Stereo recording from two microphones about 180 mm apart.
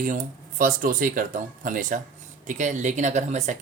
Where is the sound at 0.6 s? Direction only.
50° right (ahead or behind).